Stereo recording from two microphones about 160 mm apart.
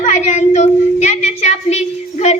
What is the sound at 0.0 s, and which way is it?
Speech, 50° left (ahead or behind).